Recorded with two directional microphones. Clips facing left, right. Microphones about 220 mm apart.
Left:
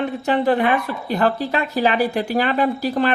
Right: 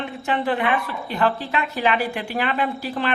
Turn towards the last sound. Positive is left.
turn(degrees=40)  # may be behind; listen again after turning